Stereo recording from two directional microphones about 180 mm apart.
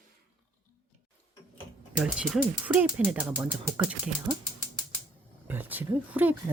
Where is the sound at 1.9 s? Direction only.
5° right (ahead or behind).